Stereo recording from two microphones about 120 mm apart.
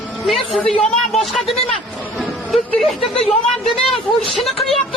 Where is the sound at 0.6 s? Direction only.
5° left (ahead or behind).